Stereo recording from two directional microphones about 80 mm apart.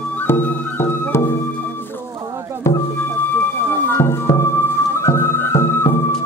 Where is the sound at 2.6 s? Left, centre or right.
Left.